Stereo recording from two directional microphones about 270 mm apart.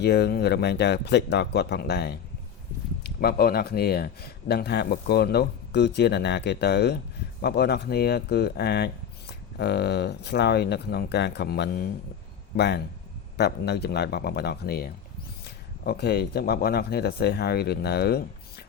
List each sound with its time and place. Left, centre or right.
0.0 s speech: left